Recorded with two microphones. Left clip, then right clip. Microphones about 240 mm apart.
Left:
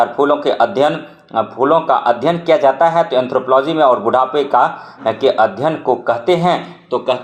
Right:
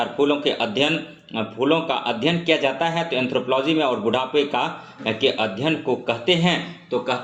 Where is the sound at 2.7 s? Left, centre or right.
Centre.